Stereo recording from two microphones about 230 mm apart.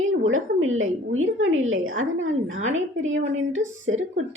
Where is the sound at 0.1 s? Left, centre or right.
Right.